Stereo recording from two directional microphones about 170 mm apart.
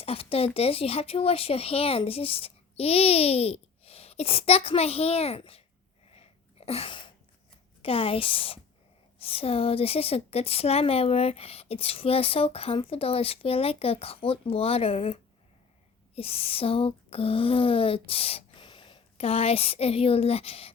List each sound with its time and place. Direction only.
0.0 s a woman's voice: 35° left (ahead or behind)
6.1 s sneeze: 35° left (ahead or behind)
7.8 s a woman's voice: 35° left (ahead or behind)
16.1 s a sound: 35° left (ahead or behind)